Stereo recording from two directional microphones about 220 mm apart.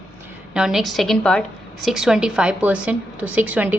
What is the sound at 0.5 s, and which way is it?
A woman's voice, centre (ahead or behind).